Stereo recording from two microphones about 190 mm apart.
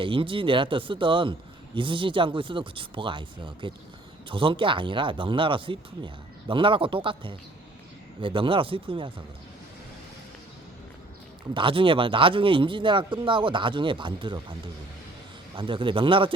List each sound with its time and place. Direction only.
0.0 s speech: 25° right (ahead or behind)
11.5 s speech: 25° right (ahead or behind)
15.5 s speech: 25° right (ahead or behind)